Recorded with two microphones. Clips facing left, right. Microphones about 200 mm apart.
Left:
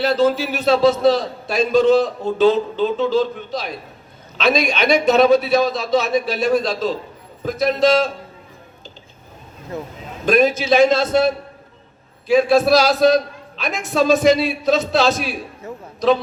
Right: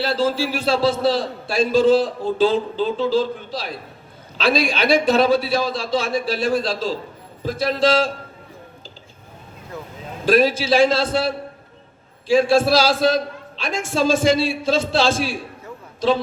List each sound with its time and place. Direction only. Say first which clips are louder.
0.0 s a man's voice: left 4 dB; 30° right (ahead or behind)
10.2 s a man's voice: left 1 dB; 30° right (ahead or behind)
12.3 s a man's voice: left 2 dB; 30° right (ahead or behind)